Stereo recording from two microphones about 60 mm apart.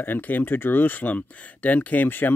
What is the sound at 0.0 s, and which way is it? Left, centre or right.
Speech, left.